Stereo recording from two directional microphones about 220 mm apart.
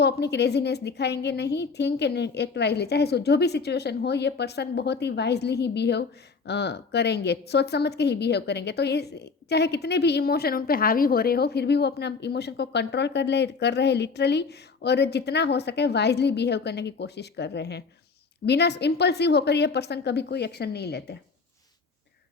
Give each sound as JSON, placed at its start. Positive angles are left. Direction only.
{"t": 0.0, "sound": "a woman's voice", "side_deg": 50}